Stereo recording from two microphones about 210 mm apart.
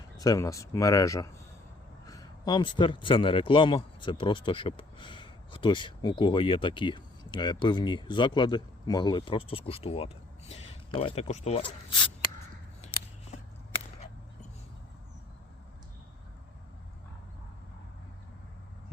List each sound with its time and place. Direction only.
0.2 s a man's voice: 15° left (ahead or behind)